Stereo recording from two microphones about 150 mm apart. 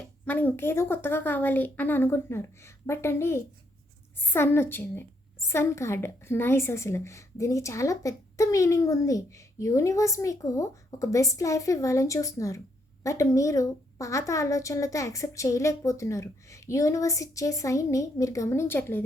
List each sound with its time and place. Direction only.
0.3 s a woman's voice: 10° left (ahead or behind)